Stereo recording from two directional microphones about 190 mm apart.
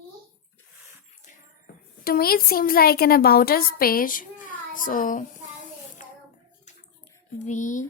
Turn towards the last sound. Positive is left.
turn(degrees=40)  # may be behind; listen again after turning